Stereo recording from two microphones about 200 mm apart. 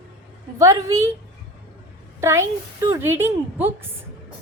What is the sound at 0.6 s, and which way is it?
Speech, 15° right (ahead or behind).